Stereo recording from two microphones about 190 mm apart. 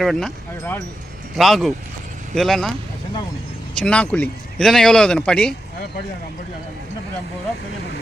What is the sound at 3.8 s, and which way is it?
Speech, 5° left (ahead or behind).